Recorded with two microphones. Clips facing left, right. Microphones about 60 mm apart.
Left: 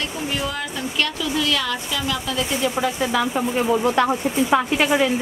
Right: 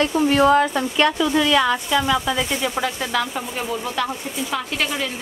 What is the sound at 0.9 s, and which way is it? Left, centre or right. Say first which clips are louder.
Speech: right 5 dB; right.